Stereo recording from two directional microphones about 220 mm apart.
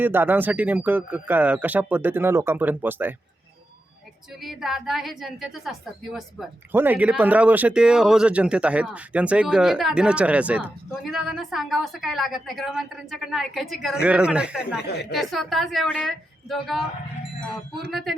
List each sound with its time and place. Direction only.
0.0 s speech: 10° right (ahead or behind)
4.4 s a woman's voice: centre (ahead or behind)